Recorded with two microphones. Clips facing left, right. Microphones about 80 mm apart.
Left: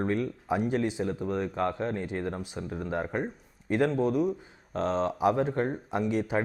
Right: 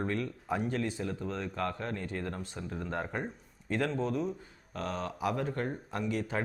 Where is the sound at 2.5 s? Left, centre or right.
Centre.